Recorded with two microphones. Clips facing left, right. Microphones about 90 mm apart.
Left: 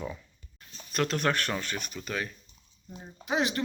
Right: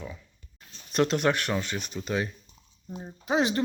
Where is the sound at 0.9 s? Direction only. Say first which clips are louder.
Right 4 dB; 20° right (ahead or behind).